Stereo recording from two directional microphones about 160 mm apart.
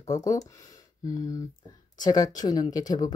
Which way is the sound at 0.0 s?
20° left (ahead or behind).